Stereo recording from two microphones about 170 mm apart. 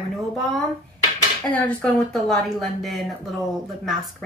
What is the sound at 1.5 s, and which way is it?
Speech, 5° left (ahead or behind).